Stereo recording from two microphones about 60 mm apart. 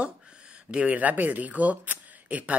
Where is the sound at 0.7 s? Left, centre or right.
Right.